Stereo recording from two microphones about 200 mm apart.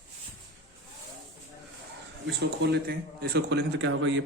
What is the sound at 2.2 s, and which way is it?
Speech, 55° right (ahead or behind).